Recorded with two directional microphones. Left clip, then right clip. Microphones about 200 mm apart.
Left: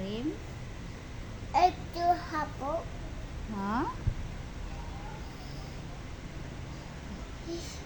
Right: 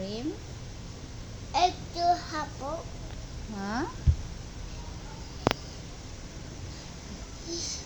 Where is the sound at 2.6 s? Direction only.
20° left (ahead or behind).